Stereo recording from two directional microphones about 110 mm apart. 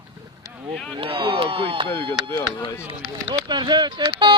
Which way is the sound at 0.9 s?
50° right (ahead or behind).